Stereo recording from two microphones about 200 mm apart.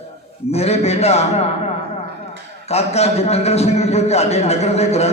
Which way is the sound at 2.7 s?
30° left (ahead or behind).